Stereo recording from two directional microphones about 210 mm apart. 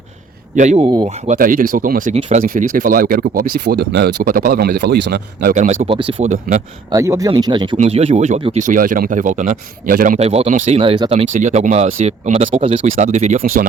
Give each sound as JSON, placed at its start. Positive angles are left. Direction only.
{"t": 0.5, "sound": "speech", "side_deg": -35}
{"t": 5.8, "sound": "speech", "side_deg": -25}
{"t": 6.9, "sound": "speech", "side_deg": -15}